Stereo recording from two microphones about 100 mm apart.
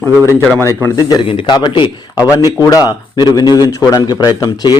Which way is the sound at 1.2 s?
65° left (ahead or behind).